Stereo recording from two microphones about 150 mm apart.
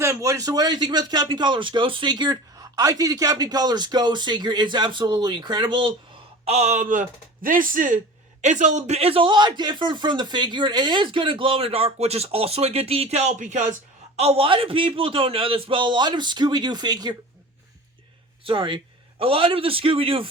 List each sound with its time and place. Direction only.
0.0 s speech: 20° right (ahead or behind)
6.4 s speech: 45° right (ahead or behind)
14.2 s speech: 40° right (ahead or behind)
18.4 s speech: 35° right (ahead or behind)